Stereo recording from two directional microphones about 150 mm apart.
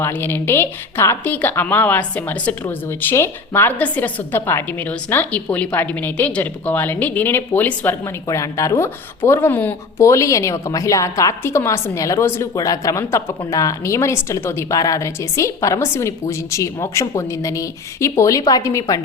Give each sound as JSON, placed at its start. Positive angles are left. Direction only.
{"t": 0.0, "sound": "a woman's voice", "side_deg": 15}